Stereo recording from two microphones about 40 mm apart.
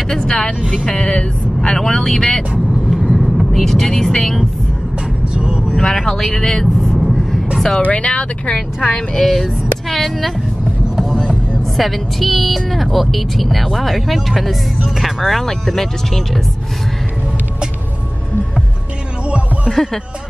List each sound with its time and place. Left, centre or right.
0.1 s speech: left
0.6 s speech: centre
0.8 s speech: left
1.8 s speech: centre
2.9 s vehicle: centre
5.3 s vehicle: right
5.8 s speech: centre
6.0 s vehicle: centre
7.8 s speech: left
8.5 s a woman's voice: centre
11.7 s a woman's voice: centre
19.2 s music: right
19.7 s speech: centre